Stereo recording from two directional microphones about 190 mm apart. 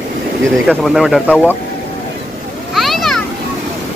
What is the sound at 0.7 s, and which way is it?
Speech, 5° right (ahead or behind).